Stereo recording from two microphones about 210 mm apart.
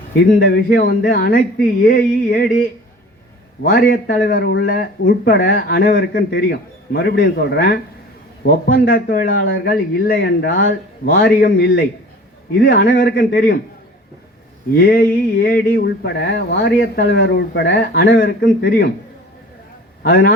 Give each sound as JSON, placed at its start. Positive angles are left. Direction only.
{"t": 0.2, "sound": "a man's voice", "side_deg": 45}
{"t": 3.6, "sound": "a man's voice", "side_deg": 45}
{"t": 12.7, "sound": "a man's voice", "side_deg": 45}
{"t": 14.8, "sound": "a man's voice", "side_deg": 45}
{"t": 18.2, "sound": "a man's voice", "side_deg": 50}
{"t": 20.0, "sound": "a man's voice", "side_deg": 45}